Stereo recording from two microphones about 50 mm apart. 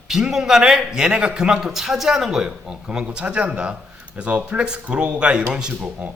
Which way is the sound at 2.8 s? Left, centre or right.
Centre.